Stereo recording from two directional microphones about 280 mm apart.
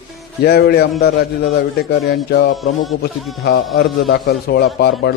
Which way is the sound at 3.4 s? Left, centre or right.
Left.